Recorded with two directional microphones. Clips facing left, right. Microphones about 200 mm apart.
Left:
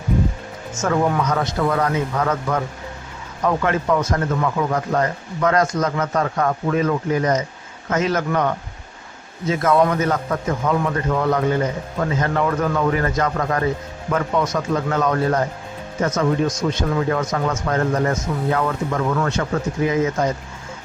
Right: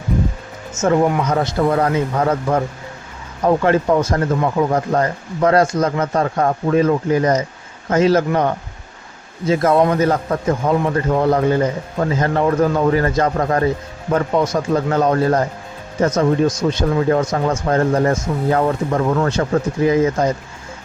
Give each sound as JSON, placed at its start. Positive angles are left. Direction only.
{"t": 0.7, "sound": "speech", "side_deg": -25}
{"t": 1.2, "sound": "speech", "side_deg": -30}